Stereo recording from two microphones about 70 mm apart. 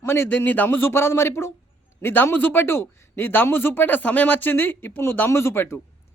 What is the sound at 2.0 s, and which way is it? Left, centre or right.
A man's voice, left.